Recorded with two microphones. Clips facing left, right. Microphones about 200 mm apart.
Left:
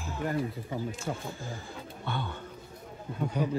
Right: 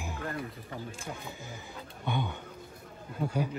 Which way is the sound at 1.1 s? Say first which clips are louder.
Left 6 dB; 50° left (ahead or behind).